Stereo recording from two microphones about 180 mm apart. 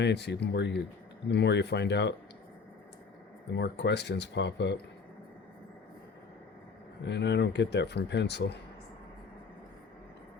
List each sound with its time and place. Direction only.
0.0 s speech: 70° left (ahead or behind)
3.5 s speech: 70° left (ahead or behind)
7.0 s speech: 75° left (ahead or behind)